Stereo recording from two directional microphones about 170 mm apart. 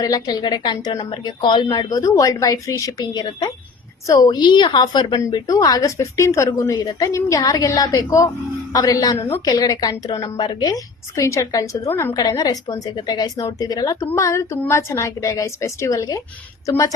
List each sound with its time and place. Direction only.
0.0 s a woman's voice: 20° left (ahead or behind)